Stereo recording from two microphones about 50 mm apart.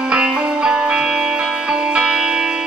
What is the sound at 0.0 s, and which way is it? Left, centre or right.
Music, centre.